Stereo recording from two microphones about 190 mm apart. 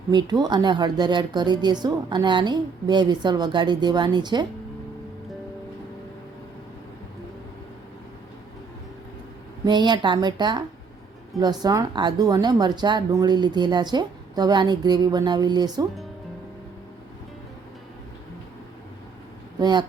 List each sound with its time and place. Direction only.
0.1 s speech: 20° right (ahead or behind)
9.6 s speech: 25° right (ahead or behind)
19.5 s speech: 20° right (ahead or behind)